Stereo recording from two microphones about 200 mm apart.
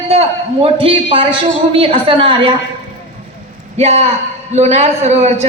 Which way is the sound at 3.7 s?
30° right (ahead or behind).